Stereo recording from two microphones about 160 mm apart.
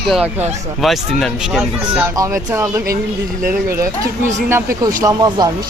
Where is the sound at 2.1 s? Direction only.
20° right (ahead or behind).